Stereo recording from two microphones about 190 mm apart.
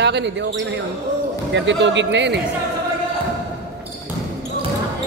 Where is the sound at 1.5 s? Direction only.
70° right (ahead or behind).